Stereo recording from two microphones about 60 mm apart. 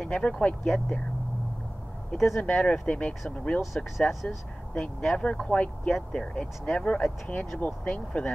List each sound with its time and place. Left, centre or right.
0.0 s speech: centre
2.1 s speech: centre
2.4 s speech: centre